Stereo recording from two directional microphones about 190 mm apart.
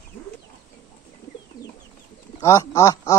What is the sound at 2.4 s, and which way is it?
Speech, 15° left (ahead or behind).